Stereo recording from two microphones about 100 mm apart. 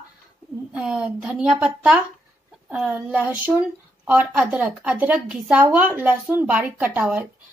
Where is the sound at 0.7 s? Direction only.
10° right (ahead or behind).